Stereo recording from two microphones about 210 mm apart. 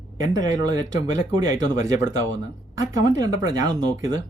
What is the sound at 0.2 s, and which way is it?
Speech, 20° right (ahead or behind).